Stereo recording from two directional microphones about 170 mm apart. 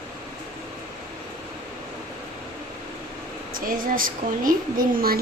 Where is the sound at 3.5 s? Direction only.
55° right (ahead or behind).